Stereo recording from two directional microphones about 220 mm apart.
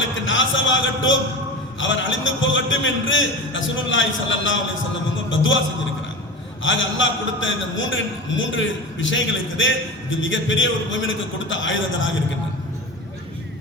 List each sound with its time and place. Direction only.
0.3 s a man's voice: 60° left (ahead or behind)